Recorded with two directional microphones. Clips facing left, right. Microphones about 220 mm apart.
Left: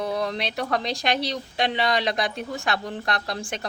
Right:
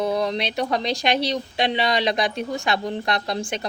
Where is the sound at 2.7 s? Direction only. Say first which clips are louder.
Right 4 dB; 25° right (ahead or behind).